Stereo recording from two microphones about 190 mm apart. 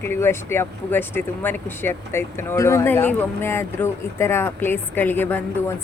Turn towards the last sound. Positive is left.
turn(degrees=10)  # may be behind; listen again after turning